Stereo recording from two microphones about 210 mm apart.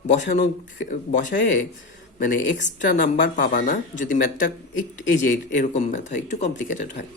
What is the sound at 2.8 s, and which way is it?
Speech, 40° left (ahead or behind).